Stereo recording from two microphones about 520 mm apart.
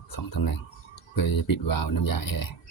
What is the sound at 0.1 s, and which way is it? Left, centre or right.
Speech, left.